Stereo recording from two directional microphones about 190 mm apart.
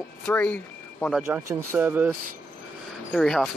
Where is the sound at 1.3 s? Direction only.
10° right (ahead or behind).